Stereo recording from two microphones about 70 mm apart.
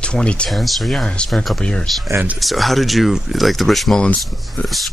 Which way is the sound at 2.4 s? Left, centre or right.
Centre.